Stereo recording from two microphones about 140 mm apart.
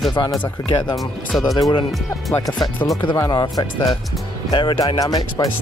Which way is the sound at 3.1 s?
30° left (ahead or behind).